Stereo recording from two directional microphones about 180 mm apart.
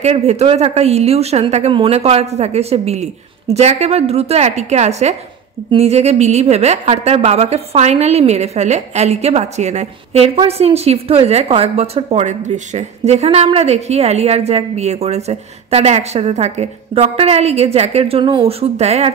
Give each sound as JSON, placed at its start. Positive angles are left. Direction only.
{"t": 0.0, "sound": "a woman's voice", "side_deg": -35}